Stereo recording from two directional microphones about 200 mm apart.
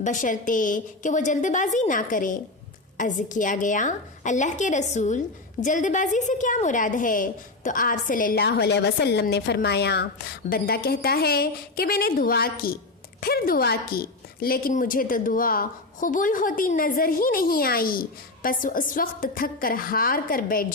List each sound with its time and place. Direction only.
0.0 s a woman's voice: 40° left (ahead or behind)